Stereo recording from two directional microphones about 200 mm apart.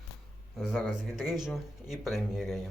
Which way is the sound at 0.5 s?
Centre (ahead or behind).